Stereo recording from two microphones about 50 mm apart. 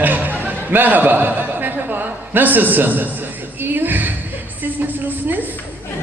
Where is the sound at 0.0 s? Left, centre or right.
Right.